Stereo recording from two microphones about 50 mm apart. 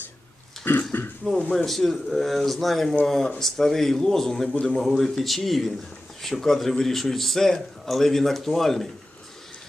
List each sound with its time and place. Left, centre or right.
0.7 s speech: left
1.5 s a man's voice: centre